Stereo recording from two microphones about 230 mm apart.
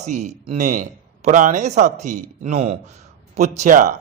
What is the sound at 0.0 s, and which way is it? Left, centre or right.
A man's voice, right.